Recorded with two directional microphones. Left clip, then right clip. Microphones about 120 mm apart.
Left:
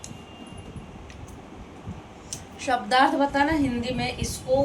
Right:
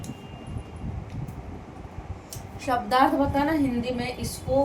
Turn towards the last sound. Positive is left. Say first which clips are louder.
# left 1 dB
turn(degrees=-25)  # may be behind; listen again after turning